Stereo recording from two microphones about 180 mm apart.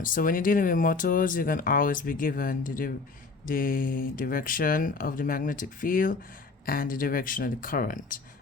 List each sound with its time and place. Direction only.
0.0 s speech: 50° left (ahead or behind)